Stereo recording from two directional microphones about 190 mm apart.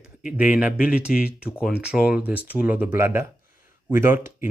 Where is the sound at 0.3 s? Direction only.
5° right (ahead or behind).